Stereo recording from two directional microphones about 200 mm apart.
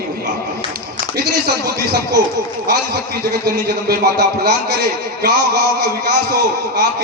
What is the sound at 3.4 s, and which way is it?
A man's voice, 55° right (ahead or behind).